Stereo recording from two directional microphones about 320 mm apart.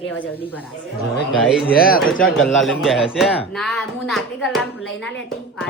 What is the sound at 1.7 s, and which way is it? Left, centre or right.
Speech, left.